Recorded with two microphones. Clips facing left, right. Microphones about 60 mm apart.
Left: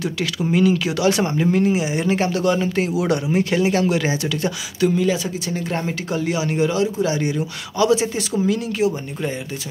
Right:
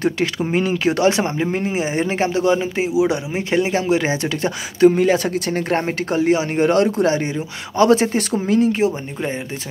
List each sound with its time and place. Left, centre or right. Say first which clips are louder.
0.5 s speech: left 3 dB; right
6.7 s speech: right 4 dB; right
7.2 s speech: left 1 dB; right